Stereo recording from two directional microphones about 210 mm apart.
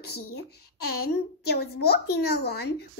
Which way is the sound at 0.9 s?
50° left (ahead or behind).